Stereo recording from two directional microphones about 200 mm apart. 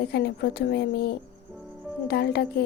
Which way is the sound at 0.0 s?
55° left (ahead or behind).